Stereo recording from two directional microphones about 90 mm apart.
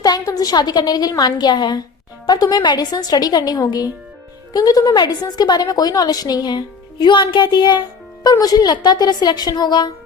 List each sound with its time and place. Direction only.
0.0 s a woman's voice: 45° left (ahead or behind)